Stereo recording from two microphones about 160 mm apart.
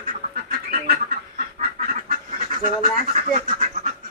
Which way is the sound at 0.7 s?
65° right (ahead or behind).